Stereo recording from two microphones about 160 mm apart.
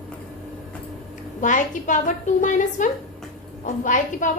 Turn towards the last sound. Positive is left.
turn(degrees=50)  # may be behind; listen again after turning